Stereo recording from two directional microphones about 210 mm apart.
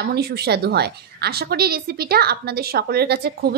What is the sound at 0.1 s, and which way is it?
A woman's voice, 50° right (ahead or behind).